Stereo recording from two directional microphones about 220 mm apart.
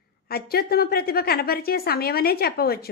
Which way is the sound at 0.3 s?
45° left (ahead or behind).